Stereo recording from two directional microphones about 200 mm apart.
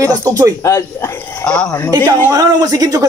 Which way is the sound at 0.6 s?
15° left (ahead or behind).